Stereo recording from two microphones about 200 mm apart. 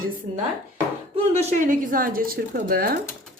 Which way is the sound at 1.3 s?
40° right (ahead or behind).